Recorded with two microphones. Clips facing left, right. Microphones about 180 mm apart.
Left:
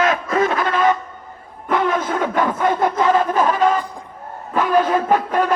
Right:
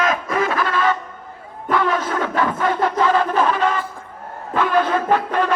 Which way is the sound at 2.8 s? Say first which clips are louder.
Even; 15° left (ahead or behind).